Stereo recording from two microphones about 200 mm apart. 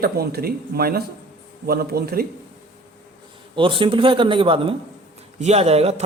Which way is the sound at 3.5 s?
25° right (ahead or behind).